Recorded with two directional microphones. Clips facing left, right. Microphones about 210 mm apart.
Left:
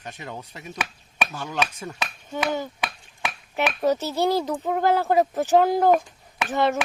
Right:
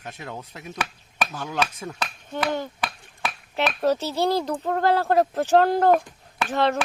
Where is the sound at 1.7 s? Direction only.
5° left (ahead or behind).